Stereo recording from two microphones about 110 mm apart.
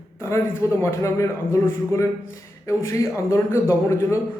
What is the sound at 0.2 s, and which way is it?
Speech, 25° left (ahead or behind).